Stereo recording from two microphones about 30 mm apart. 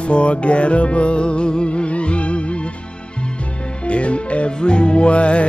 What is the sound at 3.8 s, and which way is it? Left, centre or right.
Speech, left.